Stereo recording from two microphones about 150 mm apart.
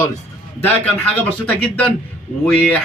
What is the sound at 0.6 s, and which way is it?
A man's voice, 10° left (ahead or behind).